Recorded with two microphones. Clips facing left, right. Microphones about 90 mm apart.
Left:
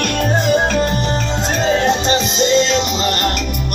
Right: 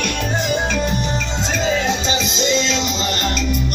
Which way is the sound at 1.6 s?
50° left (ahead or behind).